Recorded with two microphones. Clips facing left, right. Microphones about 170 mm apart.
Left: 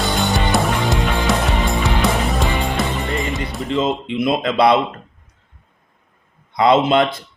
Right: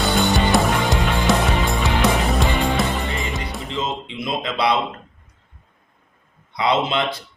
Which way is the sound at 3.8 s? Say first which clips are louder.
Left 8 dB; 55° left (ahead or behind).